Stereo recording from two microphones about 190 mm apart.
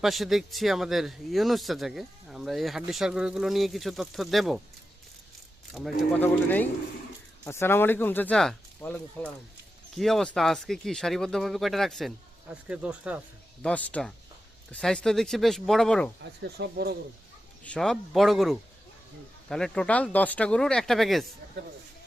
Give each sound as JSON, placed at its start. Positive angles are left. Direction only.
{"t": 0.0, "sound": "speech", "side_deg": 0}
{"t": 5.7, "sound": "speech", "side_deg": 0}
{"t": 13.6, "sound": "speech", "side_deg": 5}
{"t": 16.6, "sound": "speech", "side_deg": -55}
{"t": 17.6, "sound": "speech", "side_deg": 5}